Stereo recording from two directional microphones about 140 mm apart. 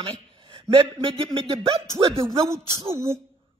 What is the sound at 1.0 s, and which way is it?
Speech, 40° right (ahead or behind).